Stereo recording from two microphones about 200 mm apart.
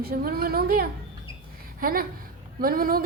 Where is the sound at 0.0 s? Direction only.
50° right (ahead or behind).